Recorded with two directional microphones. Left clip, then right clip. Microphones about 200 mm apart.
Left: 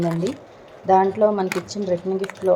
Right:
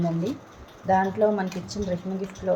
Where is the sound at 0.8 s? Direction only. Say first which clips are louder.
Left 5 dB; 20° left (ahead or behind).